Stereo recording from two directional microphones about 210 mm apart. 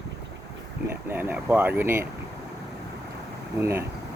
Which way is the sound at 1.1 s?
10° right (ahead or behind).